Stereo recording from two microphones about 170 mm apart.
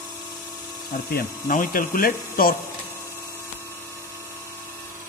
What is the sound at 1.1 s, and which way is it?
Speech, 55° left (ahead or behind).